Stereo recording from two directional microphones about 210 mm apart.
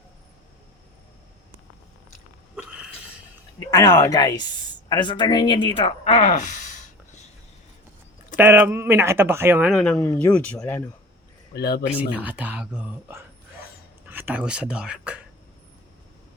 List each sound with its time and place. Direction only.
2.6 s a sound: 5° right (ahead or behind)
3.7 s speech: 15° left (ahead or behind); by 6.7 s 35° left (ahead or behind)
8.4 s speech: 10° right (ahead or behind); by 10.9 s 10° left (ahead or behind)
11.5 s speech: 50° left (ahead or behind)
11.9 s speech: 5° right (ahead or behind)